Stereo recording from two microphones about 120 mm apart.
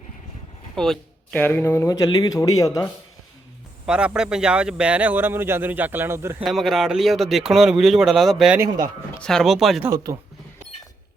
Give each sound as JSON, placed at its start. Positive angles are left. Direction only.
{"t": 0.8, "sound": "speech", "side_deg": 5}
{"t": 1.4, "sound": "speech", "side_deg": 15}
{"t": 3.8, "sound": "a man's voice", "side_deg": -10}
{"t": 6.4, "sound": "speech", "side_deg": 0}
{"t": 9.8, "sound": "speech", "side_deg": -25}